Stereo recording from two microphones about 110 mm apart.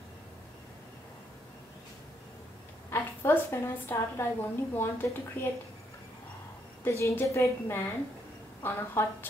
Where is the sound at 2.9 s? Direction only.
25° left (ahead or behind).